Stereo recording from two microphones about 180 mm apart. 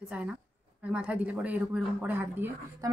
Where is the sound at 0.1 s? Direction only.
5° right (ahead or behind).